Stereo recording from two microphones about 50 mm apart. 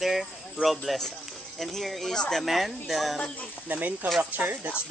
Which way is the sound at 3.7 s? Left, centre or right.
Right.